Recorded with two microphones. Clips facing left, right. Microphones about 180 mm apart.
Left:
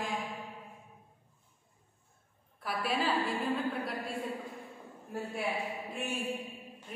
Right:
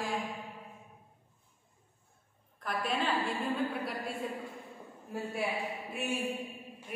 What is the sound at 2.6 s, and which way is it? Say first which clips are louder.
A woman's voice: left 1 dB; 5° left (ahead or behind).